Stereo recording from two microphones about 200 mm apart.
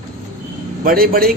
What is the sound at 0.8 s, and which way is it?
Speech, 45° right (ahead or behind).